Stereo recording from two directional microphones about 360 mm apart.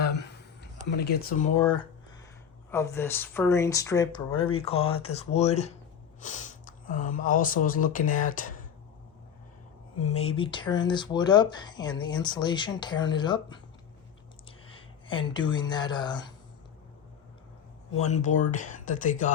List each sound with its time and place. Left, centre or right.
0.0 s a sound: left
0.9 s speech: left
2.6 s speech: centre
4.7 s speech: left
4.9 s speech: centre
10.0 s speech: centre
18.0 s speech: centre